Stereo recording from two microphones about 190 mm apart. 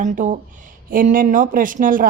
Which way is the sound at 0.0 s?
40° right (ahead or behind).